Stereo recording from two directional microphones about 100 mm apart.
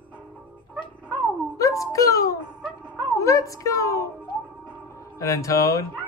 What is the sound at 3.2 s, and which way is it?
A child's voice, 35° left (ahead or behind).